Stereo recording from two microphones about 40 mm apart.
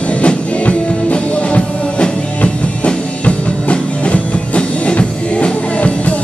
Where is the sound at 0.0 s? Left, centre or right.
Left.